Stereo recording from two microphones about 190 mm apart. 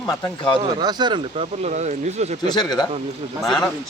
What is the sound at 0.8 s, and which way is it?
Speech, 20° right (ahead or behind).